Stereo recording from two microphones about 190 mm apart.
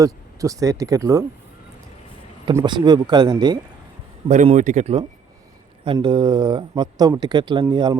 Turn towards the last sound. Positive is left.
turn(degrees=-25)  # may be behind; listen again after turning